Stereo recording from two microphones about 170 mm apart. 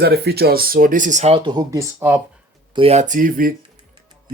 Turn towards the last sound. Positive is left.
turn(degrees=-55)  # may be behind; listen again after turning